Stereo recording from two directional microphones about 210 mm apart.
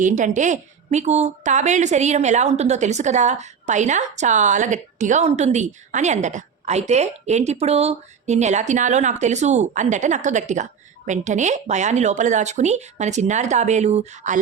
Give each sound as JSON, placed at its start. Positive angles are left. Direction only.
{"t": 0.0, "sound": "a woman's voice", "side_deg": -35}